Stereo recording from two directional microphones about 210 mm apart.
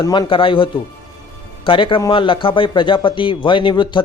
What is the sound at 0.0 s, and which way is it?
A man's voice, 20° left (ahead or behind).